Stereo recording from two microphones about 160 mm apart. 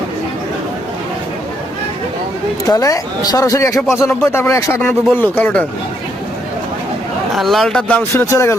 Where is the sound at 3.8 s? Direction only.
Centre (ahead or behind).